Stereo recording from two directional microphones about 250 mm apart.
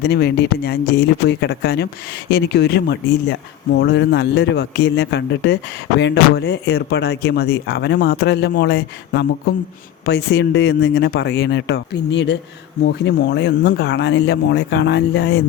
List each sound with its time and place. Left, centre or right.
0.0 s speech: left